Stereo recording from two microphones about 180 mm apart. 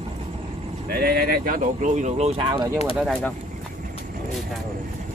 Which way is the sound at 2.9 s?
Centre (ahead or behind).